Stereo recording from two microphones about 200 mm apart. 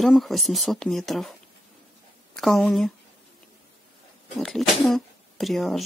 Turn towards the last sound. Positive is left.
turn(degrees=0)  # may be behind; listen again after turning